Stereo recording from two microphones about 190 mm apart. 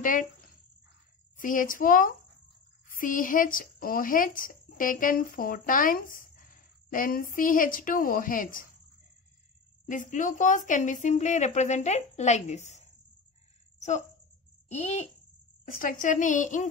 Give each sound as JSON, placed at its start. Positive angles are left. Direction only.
{"t": 0.0, "sound": "speech", "side_deg": 45}
{"t": 1.4, "sound": "speech", "side_deg": 45}
{"t": 9.8, "sound": "speech", "side_deg": 40}
{"t": 13.7, "sound": "a sound", "side_deg": 35}
{"t": 14.7, "sound": "speech", "side_deg": 35}